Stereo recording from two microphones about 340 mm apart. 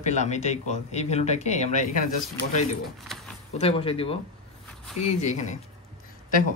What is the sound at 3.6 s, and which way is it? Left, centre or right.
Speech, centre.